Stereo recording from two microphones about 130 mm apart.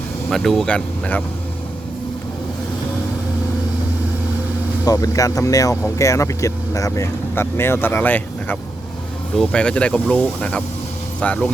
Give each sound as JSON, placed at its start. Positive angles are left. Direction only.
{"t": 0.3, "sound": "speech", "side_deg": 0}
{"t": 4.9, "sound": "speech", "side_deg": 25}